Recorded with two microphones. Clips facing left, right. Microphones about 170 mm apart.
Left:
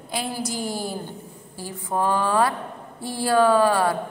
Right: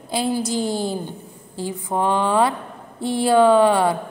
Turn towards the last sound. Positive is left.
turn(degrees=-20)  # may be behind; listen again after turning